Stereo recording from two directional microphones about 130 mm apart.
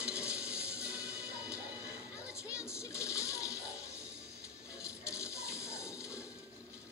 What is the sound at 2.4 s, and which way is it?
Music, 20° left (ahead or behind).